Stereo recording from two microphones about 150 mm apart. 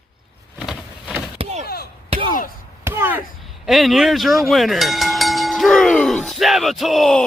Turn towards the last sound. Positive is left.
turn(degrees=0)  # may be behind; listen again after turning